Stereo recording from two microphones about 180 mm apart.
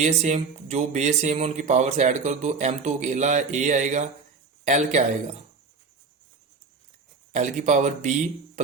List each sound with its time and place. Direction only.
0.0 s speech: 40° right (ahead or behind)
7.3 s speech: 40° right (ahead or behind)